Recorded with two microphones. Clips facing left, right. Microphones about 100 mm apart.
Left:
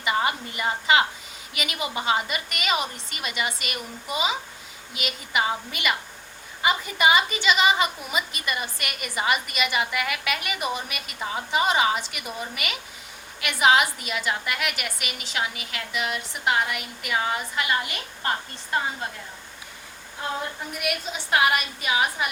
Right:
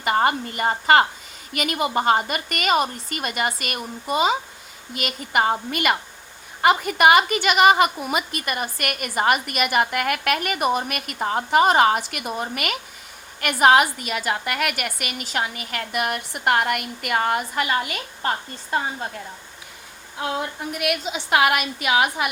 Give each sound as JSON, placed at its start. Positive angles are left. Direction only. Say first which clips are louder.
{"t": 0.0, "sound": "a woman's voice", "louder": "right 5 dB", "side_deg": -50}
{"t": 6.6, "sound": "a woman's voice", "louder": "right 6 dB", "side_deg": -65}
{"t": 20.7, "sound": "a woman's voice", "louder": "right 5 dB", "side_deg": -70}